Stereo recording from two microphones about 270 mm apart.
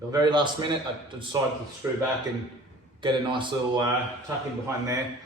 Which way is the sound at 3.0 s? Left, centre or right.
Centre.